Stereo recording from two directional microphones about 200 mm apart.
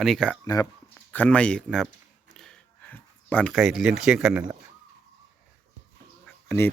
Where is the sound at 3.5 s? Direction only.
Centre (ahead or behind).